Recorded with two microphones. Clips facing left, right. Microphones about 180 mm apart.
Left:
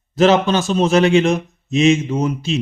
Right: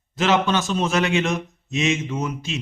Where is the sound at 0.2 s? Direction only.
35° left (ahead or behind).